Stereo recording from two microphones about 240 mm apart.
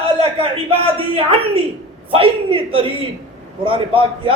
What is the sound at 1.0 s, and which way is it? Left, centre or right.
Speech, right.